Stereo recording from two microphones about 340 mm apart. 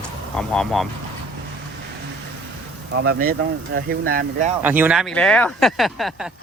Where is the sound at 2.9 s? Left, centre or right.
Right.